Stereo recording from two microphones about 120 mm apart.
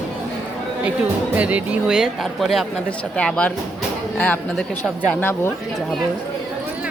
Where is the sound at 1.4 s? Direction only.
10° right (ahead or behind); by 5.1 s 10° left (ahead or behind).